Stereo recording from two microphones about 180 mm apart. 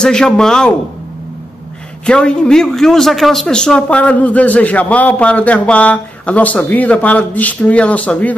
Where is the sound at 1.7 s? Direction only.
5° left (ahead or behind).